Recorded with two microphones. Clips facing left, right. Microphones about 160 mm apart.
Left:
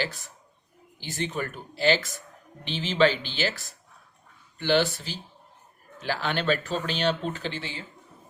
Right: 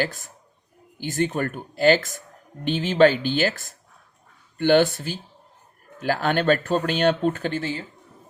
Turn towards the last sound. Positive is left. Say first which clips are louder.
# right 7 dB
turn(degrees=-45)  # may be behind; listen again after turning